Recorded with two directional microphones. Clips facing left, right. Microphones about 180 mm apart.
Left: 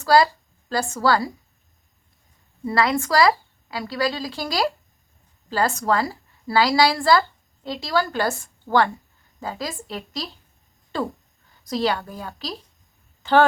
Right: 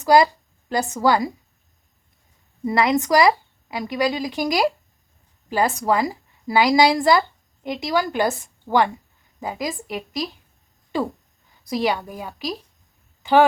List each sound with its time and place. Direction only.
0.0 s a woman's voice: 20° right (ahead or behind)
2.6 s a woman's voice: 20° right (ahead or behind)